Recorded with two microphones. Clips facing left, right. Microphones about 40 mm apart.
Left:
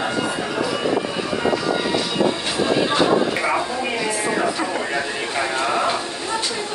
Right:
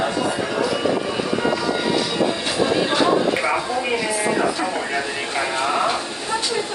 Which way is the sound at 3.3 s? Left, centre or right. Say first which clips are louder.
Even; centre.